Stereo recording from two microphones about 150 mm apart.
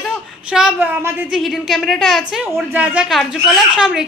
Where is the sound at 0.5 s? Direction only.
5° right (ahead or behind).